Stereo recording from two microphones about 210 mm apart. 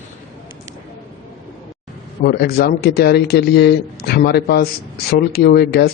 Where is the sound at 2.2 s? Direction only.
50° left (ahead or behind).